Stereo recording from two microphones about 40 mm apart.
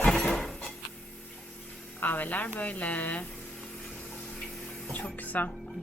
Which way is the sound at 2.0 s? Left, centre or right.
Left.